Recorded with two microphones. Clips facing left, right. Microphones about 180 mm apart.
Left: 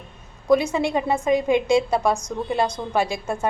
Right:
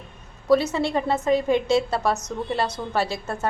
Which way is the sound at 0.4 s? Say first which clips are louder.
Left 1 dB; 15° left (ahead or behind).